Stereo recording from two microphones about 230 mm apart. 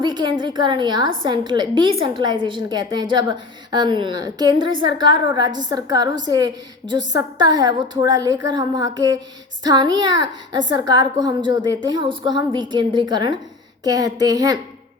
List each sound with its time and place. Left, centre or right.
0.0 s a woman's voice: centre